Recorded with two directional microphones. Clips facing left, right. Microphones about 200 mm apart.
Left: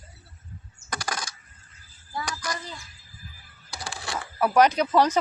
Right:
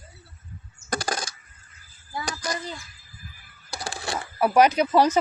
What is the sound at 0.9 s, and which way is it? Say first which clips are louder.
Coin: right 5 dB; 25° right (ahead or behind).